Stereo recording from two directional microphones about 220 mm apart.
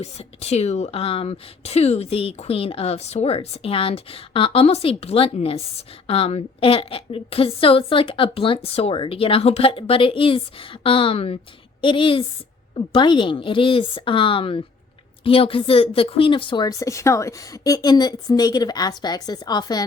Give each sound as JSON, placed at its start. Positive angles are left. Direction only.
{"t": 0.0, "sound": "speech", "side_deg": 30}